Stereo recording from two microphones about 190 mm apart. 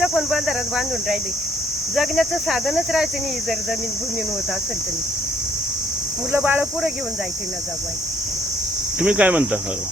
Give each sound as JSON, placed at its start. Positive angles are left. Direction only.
{"t": 0.0, "sound": "speech", "side_deg": 0}
{"t": 6.3, "sound": "speech", "side_deg": -10}
{"t": 9.0, "sound": "speech", "side_deg": -5}